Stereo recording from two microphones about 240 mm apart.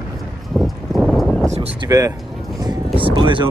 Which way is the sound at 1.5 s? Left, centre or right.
Right.